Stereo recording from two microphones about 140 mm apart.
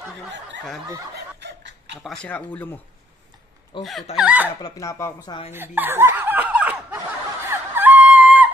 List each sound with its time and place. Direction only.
2.2 s speech: 10° left (ahead or behind)
3.7 s speech: 35° left (ahead or behind)
4.2 s speech: 10° right (ahead or behind)
4.6 s speech: 25° left (ahead or behind)
5.5 s snicker: 15° right (ahead or behind)
7.4 s fowl: 15° right (ahead or behind)